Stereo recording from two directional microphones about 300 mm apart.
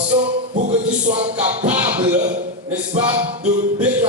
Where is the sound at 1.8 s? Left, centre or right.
Centre.